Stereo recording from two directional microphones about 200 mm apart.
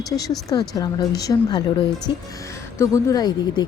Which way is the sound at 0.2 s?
20° left (ahead or behind).